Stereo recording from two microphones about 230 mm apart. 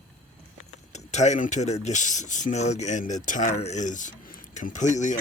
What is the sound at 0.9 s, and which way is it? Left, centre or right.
Speech, left.